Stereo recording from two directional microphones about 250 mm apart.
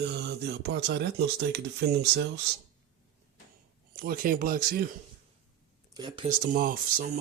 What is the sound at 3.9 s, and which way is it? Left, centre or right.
Speech, right.